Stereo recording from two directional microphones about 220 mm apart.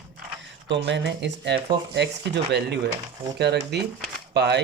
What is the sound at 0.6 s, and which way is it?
Speech, 55° right (ahead or behind).